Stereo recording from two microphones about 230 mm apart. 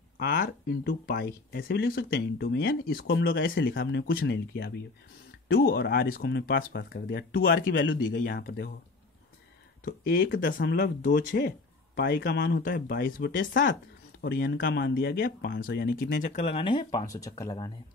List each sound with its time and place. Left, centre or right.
0.2 s speech: left
9.8 s speech: left; by 17.7 s centre